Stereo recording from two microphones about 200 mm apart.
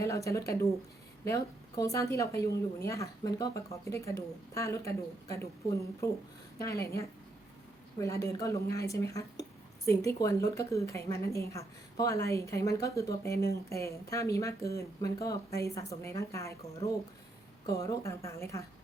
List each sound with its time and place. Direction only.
0.0 s speech: 15° left (ahead or behind)